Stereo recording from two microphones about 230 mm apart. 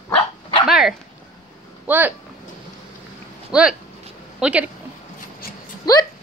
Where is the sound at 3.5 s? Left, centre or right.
Centre.